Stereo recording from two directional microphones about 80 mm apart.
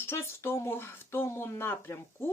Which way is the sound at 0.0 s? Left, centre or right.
Left.